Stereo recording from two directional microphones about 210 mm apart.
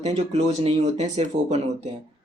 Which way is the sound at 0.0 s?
30° right (ahead or behind).